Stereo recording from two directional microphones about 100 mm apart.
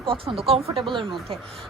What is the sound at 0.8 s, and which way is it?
Speech, 55° right (ahead or behind).